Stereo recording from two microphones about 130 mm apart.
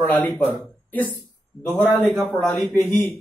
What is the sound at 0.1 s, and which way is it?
A man's voice, 10° left (ahead or behind).